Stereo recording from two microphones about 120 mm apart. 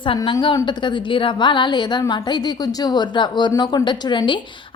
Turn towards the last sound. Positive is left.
turn(degrees=40)  # may be behind; listen again after turning